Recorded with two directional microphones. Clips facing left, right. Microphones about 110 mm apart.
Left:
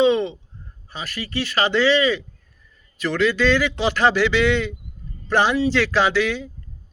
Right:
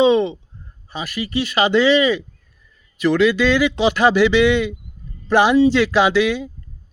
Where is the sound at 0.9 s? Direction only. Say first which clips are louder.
Right 5 dB; 15° right (ahead or behind).